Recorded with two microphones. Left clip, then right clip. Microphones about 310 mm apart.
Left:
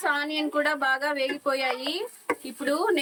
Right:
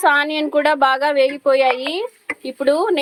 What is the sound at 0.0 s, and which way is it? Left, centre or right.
A woman's voice, centre.